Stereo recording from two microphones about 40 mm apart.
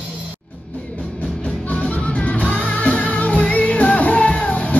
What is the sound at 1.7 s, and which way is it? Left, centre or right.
Music, left.